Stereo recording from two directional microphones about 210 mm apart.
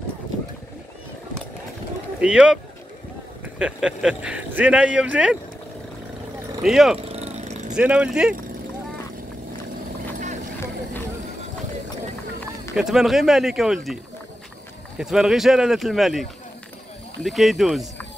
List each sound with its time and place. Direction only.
2.2 s speech: 5° right (ahead or behind)
6.6 s speech: centre (ahead or behind)
7.1 s vehicle: 30° right (ahead or behind)
7.7 s speech: 5° right (ahead or behind)
12.7 s speech: centre (ahead or behind)
15.0 s speech: centre (ahead or behind)